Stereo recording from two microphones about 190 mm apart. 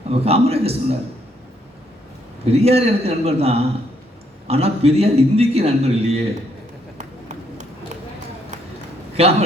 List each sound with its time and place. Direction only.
0.1 s a man's voice: 30° right (ahead or behind)
2.5 s a man's voice: 30° right (ahead or behind)
9.2 s a man's voice: 30° right (ahead or behind)